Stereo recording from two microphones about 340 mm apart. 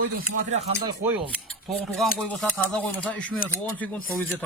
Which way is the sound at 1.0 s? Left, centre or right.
Centre.